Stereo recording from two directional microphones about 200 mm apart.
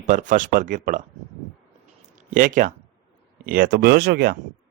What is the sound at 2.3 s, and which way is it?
Speech, 40° right (ahead or behind).